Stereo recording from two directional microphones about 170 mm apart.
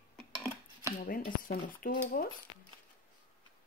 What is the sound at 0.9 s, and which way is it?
Speech, 55° left (ahead or behind).